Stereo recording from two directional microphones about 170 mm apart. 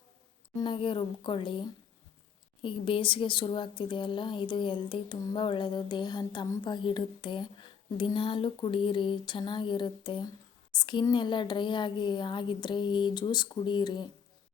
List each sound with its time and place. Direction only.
0.6 s speech: 30° left (ahead or behind)